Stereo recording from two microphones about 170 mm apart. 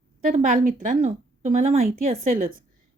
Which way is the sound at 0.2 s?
45° right (ahead or behind).